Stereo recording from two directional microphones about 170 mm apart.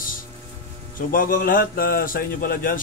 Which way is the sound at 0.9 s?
55° left (ahead or behind).